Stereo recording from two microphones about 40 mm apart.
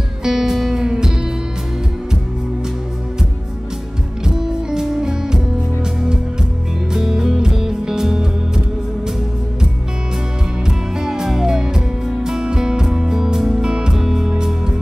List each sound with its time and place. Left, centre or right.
0.2 s music: centre
4.4 s music: centre
6.9 s music: centre
10.6 s music: centre